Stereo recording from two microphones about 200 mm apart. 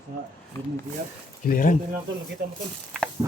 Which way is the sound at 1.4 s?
45° left (ahead or behind).